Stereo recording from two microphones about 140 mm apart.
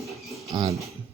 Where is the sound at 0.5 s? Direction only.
30° right (ahead or behind).